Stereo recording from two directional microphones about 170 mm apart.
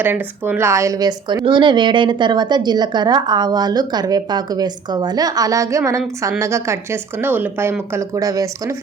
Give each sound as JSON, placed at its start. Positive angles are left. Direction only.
{"t": 0.0, "sound": "speech", "side_deg": -10}